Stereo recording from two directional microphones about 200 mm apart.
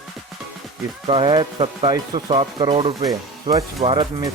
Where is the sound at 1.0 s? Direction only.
25° right (ahead or behind).